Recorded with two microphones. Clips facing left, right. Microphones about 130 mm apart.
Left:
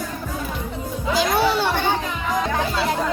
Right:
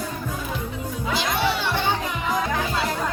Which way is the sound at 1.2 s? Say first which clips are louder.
Left 6 dB; 40° left (ahead or behind).